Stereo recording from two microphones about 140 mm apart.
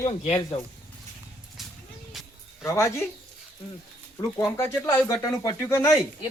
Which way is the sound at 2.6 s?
20° left (ahead or behind).